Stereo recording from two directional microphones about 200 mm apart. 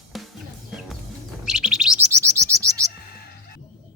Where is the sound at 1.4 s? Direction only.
5° right (ahead or behind).